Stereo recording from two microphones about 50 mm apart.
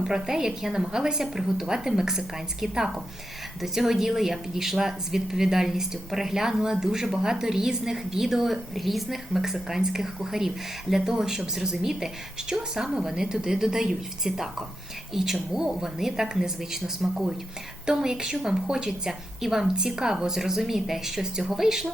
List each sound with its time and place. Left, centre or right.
0.0 s speech: centre